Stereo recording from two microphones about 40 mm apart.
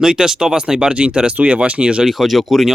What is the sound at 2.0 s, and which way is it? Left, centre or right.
Speech, centre.